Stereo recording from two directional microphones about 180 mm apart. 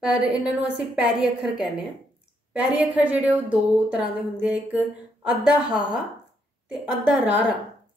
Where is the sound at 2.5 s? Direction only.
5° right (ahead or behind).